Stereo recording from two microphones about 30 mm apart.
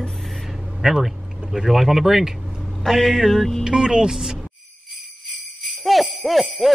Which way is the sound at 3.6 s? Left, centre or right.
Right.